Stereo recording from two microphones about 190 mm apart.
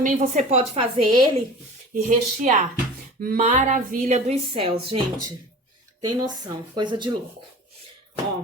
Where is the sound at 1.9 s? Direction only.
40° right (ahead or behind).